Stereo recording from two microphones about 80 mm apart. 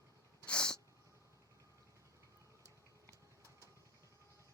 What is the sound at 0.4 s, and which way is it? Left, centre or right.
Sneeze, centre.